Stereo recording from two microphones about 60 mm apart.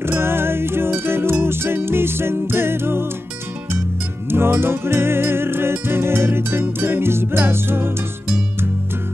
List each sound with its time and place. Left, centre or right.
0.0 s music: right
4.3 s music: right